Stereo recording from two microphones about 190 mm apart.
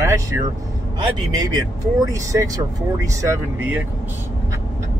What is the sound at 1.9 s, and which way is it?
Speech, 20° right (ahead or behind).